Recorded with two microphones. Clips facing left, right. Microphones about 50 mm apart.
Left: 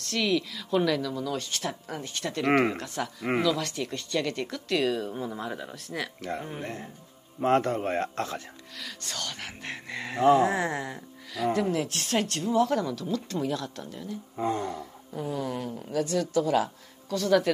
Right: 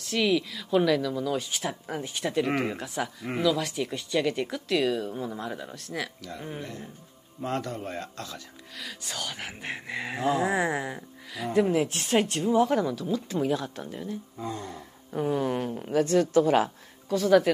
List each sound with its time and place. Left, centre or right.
0.0 s speech: centre
6.2 s speech: left
8.7 s speech: centre; by 14.1 s right
14.3 s speech: left
15.1 s a woman's voice: right
17.1 s speech: centre